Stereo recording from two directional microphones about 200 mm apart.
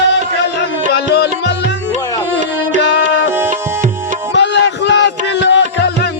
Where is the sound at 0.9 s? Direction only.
55° left (ahead or behind).